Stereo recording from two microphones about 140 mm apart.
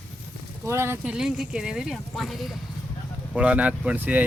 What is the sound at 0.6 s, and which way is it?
Speech, 20° right (ahead or behind).